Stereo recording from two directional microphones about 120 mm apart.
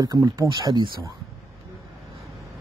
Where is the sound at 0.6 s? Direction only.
40° right (ahead or behind).